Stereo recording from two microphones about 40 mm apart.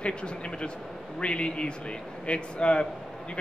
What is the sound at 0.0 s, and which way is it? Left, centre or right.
Speech, left.